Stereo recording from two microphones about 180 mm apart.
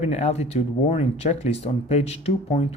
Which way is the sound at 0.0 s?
40° left (ahead or behind).